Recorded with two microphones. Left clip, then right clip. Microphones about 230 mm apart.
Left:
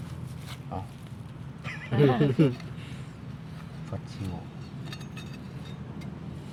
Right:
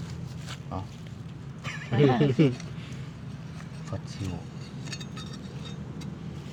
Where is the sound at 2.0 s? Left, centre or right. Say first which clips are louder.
Right 1 dB; centre.